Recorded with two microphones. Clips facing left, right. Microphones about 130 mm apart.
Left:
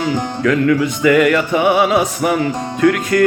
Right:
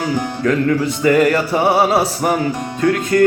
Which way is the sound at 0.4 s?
35° right (ahead or behind).